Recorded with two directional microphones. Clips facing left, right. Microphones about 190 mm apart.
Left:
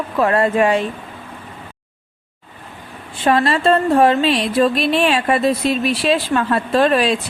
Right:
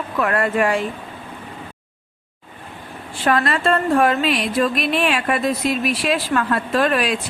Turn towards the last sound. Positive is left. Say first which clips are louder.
# left 4 dB
turn(degrees=25)  # may be behind; listen again after turning